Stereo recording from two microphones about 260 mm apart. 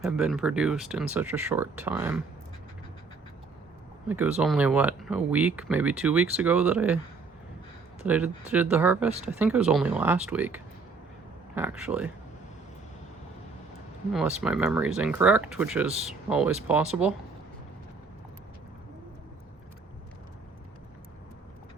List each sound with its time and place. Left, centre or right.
0.0 s speech: centre
4.1 s speech: centre
8.0 s speech: centre
14.1 s speech: centre